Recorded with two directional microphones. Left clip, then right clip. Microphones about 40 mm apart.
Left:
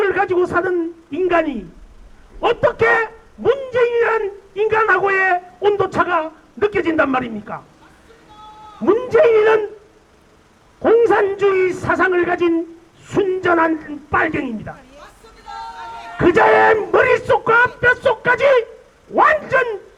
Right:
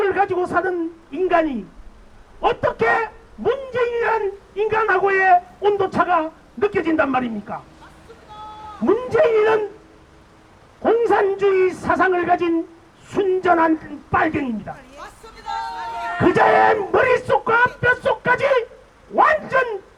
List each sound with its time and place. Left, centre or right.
0.0 s a woman's voice: left
8.8 s speech: left
10.8 s a man's voice: left
14.9 s a sound: right
16.1 s a man's voice: left